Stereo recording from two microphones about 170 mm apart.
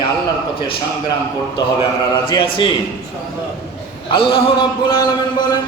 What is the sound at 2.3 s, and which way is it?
Speech, 30° left (ahead or behind).